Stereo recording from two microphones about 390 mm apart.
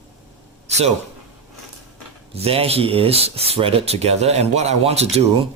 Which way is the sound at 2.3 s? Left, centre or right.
Centre.